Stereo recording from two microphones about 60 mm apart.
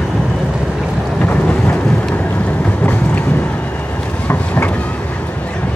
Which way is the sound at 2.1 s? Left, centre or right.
Left.